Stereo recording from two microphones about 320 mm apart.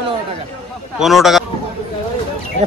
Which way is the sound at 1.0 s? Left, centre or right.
Centre.